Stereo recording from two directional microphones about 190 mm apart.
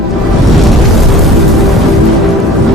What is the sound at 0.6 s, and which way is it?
Music, centre (ahead or behind).